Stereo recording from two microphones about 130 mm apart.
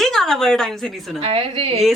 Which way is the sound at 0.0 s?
5° left (ahead or behind).